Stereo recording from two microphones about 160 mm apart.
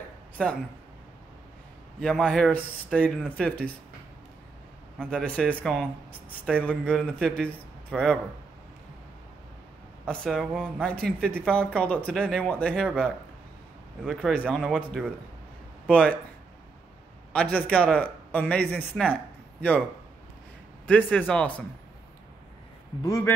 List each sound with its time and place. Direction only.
0.4 s a man's voice: 5° left (ahead or behind)
2.0 s speech: 5° left (ahead or behind)
4.9 s a man's voice: 5° left (ahead or behind)
10.0 s speech: centre (ahead or behind)
14.0 s a man's voice: 5° left (ahead or behind)
17.3 s a man's voice: 10° left (ahead or behind)
20.8 s a man's voice: 10° left (ahead or behind)
23.0 s a man's voice: 20° left (ahead or behind)